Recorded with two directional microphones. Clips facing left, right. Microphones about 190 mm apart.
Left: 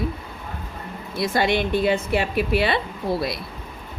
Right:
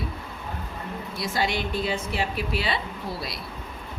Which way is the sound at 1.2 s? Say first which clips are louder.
Left 7 dB; 60° left (ahead or behind).